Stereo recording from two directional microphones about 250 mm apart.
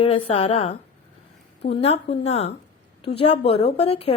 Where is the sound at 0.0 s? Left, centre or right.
Left.